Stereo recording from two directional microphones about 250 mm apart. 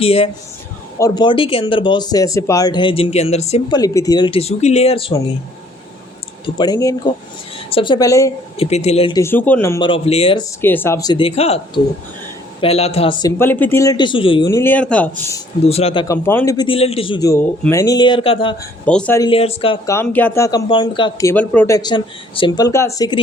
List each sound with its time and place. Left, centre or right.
0.0 s speech: left
6.4 s speech: centre
8.6 s speech: left
10.6 s speech: centre
15.6 s speech: left
18.9 s speech: centre